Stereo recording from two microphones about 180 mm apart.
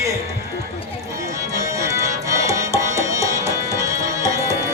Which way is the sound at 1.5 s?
15° right (ahead or behind).